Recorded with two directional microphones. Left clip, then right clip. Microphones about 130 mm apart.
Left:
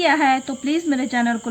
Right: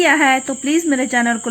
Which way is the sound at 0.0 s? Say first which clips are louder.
Right 4 dB; 35° right (ahead or behind).